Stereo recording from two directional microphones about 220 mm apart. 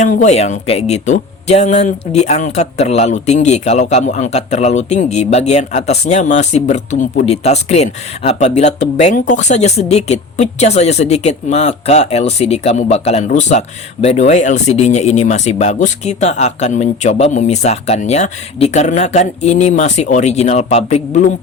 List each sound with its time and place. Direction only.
0.0 s speech: 35° left (ahead or behind)